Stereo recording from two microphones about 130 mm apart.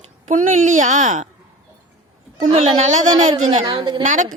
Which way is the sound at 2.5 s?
50° right (ahead or behind).